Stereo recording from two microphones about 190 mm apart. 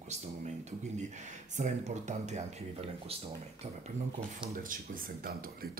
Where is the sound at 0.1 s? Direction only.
40° right (ahead or behind).